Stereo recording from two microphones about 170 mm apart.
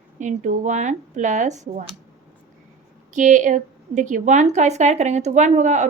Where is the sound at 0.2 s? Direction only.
45° right (ahead or behind).